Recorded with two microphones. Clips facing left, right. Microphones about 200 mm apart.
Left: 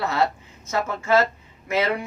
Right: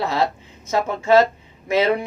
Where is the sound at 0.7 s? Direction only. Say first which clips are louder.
Right 4 dB; 20° right (ahead or behind).